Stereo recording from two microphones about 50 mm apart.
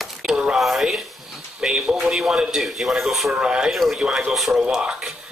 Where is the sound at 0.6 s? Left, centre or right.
Centre.